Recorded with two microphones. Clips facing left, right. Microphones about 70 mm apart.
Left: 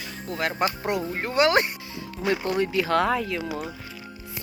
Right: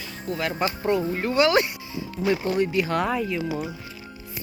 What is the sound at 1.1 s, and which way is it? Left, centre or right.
Speech, left.